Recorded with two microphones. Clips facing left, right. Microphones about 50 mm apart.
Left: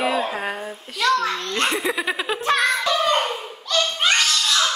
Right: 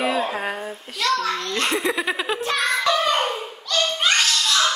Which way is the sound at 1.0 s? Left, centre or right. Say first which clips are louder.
Left 2 dB; left.